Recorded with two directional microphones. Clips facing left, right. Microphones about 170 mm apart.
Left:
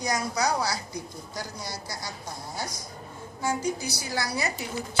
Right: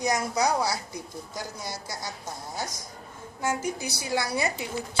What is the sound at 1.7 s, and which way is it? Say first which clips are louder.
Speech: right 1 dB; 50° right (ahead or behind).